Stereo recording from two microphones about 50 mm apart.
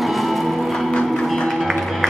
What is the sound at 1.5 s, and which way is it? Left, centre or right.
Music, centre.